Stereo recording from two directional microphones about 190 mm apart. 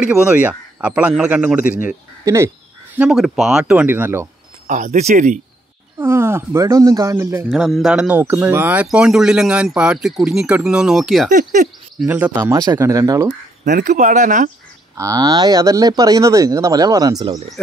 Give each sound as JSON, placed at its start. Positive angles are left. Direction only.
{"t": 0.0, "sound": "a man's voice", "side_deg": -5}
{"t": 3.0, "sound": "speech", "side_deg": 0}
{"t": 4.6, "sound": "speech", "side_deg": -40}
{"t": 5.9, "sound": "a man's voice", "side_deg": -15}
{"t": 7.4, "sound": "speech", "side_deg": 0}
{"t": 11.3, "sound": "bird", "side_deg": -40}
{"t": 12.0, "sound": "a man's voice", "side_deg": -5}
{"t": 12.4, "sound": "a man's voice", "side_deg": -20}
{"t": 13.7, "sound": "speech", "side_deg": -45}
{"t": 15.0, "sound": "speech", "side_deg": -20}